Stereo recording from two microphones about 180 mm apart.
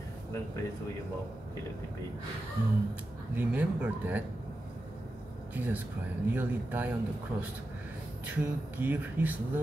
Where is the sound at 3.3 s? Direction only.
10° right (ahead or behind).